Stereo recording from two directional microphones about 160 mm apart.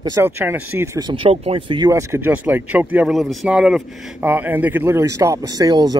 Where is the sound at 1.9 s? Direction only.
15° right (ahead or behind).